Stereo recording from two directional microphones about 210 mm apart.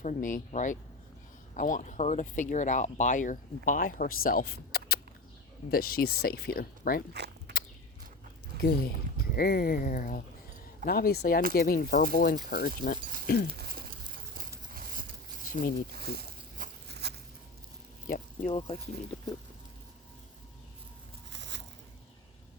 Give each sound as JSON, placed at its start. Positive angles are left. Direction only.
{"t": 0.0, "sound": "speech", "side_deg": 40}
{"t": 7.1, "sound": "a sound", "side_deg": -50}
{"t": 8.6, "sound": "speech", "side_deg": 45}
{"t": 13.6, "sound": "a sound", "side_deg": -45}
{"t": 18.1, "sound": "speech", "side_deg": 35}
{"t": 21.3, "sound": "biting", "side_deg": -55}